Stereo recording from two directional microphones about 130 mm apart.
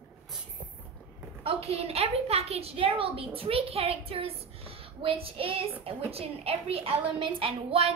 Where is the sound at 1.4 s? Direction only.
50° right (ahead or behind).